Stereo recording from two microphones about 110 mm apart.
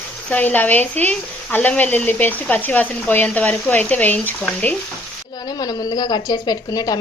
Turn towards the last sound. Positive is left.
turn(degrees=35)  # may be behind; listen again after turning